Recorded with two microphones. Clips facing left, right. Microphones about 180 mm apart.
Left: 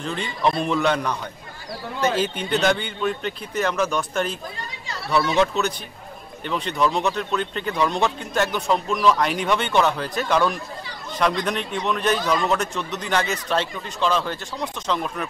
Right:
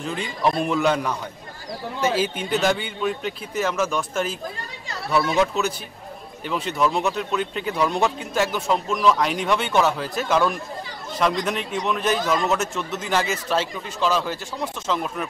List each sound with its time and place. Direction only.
0.0 s a man's voice: 5° right (ahead or behind)